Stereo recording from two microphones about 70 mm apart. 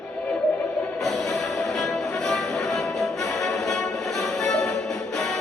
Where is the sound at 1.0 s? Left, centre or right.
Centre.